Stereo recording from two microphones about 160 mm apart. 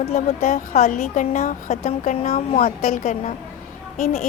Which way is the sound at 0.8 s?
50° left (ahead or behind).